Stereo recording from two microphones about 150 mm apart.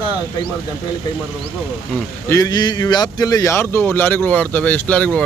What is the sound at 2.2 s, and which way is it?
Speech, 20° left (ahead or behind).